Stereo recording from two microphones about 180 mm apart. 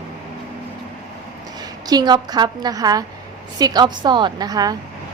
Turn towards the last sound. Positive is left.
turn(degrees=-20)  # may be behind; listen again after turning